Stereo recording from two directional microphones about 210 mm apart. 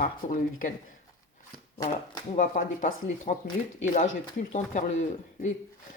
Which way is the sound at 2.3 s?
35° left (ahead or behind).